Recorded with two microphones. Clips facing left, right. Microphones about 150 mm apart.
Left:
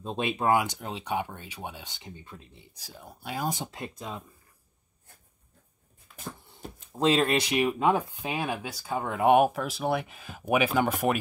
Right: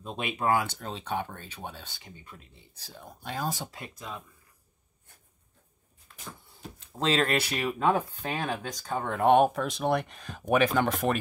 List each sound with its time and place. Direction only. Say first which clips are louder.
0.0 s speech: left 2 dB; 25° left (ahead or behind)
6.1 s a sound: left 3 dB; 5° left (ahead or behind)
6.9 s speech: left 3 dB; 15° left (ahead or behind)